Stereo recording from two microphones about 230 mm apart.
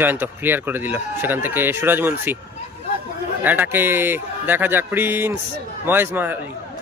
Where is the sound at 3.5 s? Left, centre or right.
Centre.